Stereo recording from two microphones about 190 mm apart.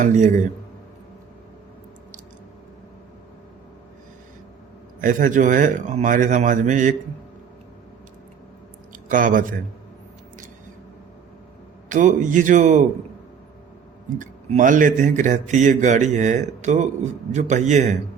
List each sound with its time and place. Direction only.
0.0 s speech: 40° right (ahead or behind)
4.9 s speech: 45° right (ahead or behind)
8.9 s speech: 45° right (ahead or behind)
11.9 s speech: 40° right (ahead or behind)
14.2 s speech: 45° right (ahead or behind)